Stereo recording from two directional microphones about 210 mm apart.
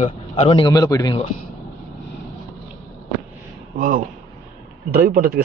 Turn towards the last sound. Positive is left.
turn(degrees=-45)  # may be behind; listen again after turning